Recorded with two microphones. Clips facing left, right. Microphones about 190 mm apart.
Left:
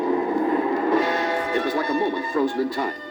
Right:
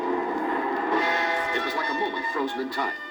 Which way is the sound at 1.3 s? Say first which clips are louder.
Left 5 dB; 40° left (ahead or behind).